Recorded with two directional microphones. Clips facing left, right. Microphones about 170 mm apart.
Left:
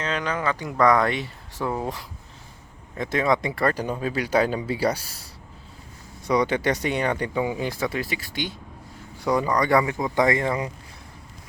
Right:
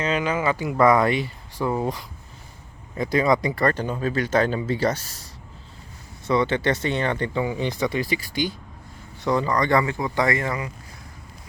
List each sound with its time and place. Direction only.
0.0 s speech: 10° right (ahead or behind); by 5.1 s 10° left (ahead or behind)
6.2 s speech: 15° left (ahead or behind)
9.2 s speech: 10° left (ahead or behind)